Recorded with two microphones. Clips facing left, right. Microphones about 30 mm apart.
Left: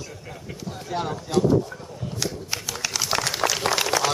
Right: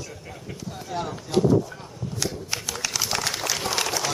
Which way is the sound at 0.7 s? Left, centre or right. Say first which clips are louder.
Left 2 dB; centre.